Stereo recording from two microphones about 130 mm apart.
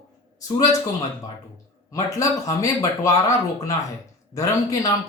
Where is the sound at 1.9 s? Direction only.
25° left (ahead or behind).